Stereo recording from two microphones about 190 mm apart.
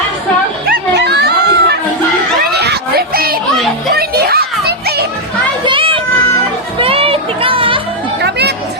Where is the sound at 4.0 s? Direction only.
55° right (ahead or behind).